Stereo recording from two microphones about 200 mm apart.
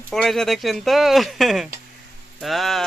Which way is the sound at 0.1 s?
Centre (ahead or behind).